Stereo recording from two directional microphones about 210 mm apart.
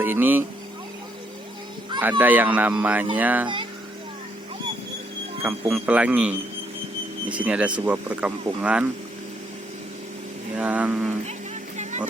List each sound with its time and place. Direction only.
0.0 s speech: 10° right (ahead or behind)
2.0 s speech: 10° right (ahead or behind)
5.4 s speech: 10° right (ahead or behind)
10.6 s speech: 5° right (ahead or behind)
11.8 s music: 35° right (ahead or behind)